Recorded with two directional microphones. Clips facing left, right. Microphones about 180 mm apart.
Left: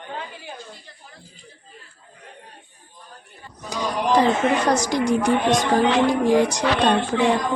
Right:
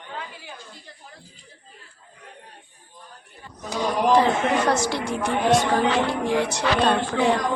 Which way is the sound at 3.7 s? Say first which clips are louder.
Right 1 dB; 15° left (ahead or behind).